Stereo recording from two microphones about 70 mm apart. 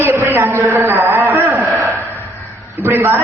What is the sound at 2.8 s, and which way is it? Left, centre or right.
Speech, right.